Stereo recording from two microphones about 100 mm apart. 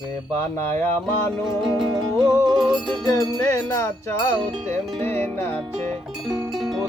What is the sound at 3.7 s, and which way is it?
Music, 25° left (ahead or behind).